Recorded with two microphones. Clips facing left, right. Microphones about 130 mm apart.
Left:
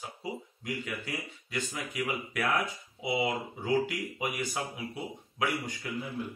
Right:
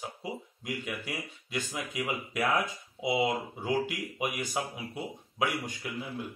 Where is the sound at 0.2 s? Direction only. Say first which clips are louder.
Even; 15° right (ahead or behind).